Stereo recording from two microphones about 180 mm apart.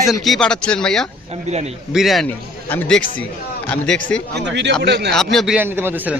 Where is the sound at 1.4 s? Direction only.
35° right (ahead or behind).